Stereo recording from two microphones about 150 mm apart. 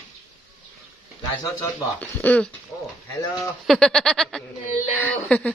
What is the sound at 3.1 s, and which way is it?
Speech, 20° left (ahead or behind).